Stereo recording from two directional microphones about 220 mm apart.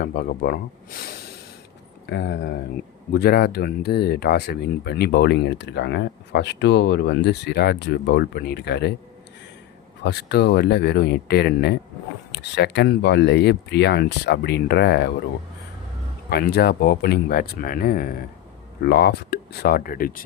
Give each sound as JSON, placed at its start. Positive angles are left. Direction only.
{"t": 0.0, "sound": "speech", "side_deg": 45}
{"t": 10.0, "sound": "speech", "side_deg": 50}
{"t": 16.3, "sound": "speech", "side_deg": 45}